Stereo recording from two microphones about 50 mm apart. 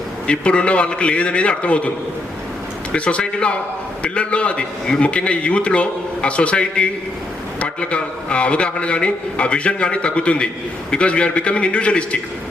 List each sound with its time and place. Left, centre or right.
0.3 s a man's voice: left
2.9 s a man's voice: left